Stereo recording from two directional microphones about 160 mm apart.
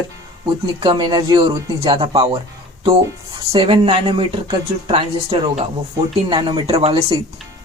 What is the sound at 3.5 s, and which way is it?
Speech, 35° right (ahead or behind).